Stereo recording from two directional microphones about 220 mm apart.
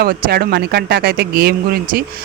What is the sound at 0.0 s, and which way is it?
Speech, 45° right (ahead or behind).